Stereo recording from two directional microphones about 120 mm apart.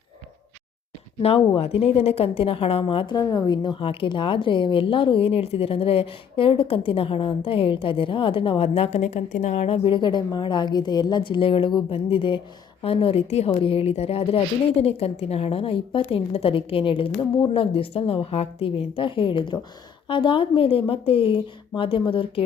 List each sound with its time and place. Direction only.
1.2 s a woman's voice: 55° left (ahead or behind)
3.2 s a woman's voice: 30° left (ahead or behind)